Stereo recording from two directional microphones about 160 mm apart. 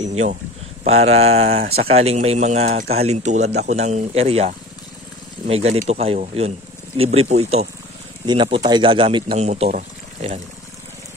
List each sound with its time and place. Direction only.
0.1 s speech: 45° right (ahead or behind)
5.5 s speech: 40° right (ahead or behind)
8.3 s speech: 30° right (ahead or behind); by 10.4 s 50° right (ahead or behind)